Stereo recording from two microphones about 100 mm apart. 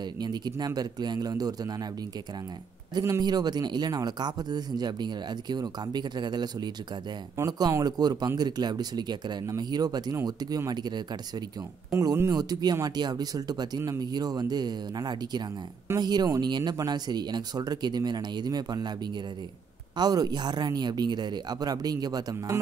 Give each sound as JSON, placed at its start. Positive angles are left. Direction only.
{"t": 0.0, "sound": "speech", "side_deg": -45}
{"t": 2.9, "sound": "speech", "side_deg": -40}
{"t": 20.0, "sound": "speech", "side_deg": -40}